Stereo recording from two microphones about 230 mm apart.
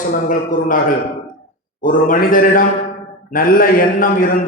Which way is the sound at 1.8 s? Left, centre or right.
Left.